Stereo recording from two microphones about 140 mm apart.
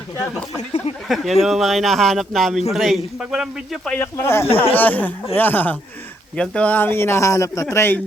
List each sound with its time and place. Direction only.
1.0 s speech: centre (ahead or behind)
3.9 s a man's voice: 15° left (ahead or behind)